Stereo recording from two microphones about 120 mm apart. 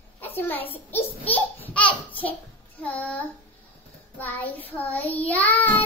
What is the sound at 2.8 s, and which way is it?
Child singing, 10° left (ahead or behind).